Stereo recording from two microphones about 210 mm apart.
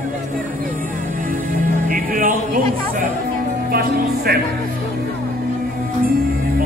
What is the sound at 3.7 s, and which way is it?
Speech, 45° right (ahead or behind).